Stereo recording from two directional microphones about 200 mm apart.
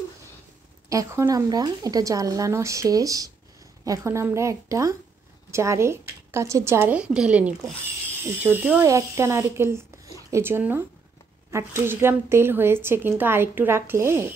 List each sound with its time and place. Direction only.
0.8 s speech: 15° right (ahead or behind)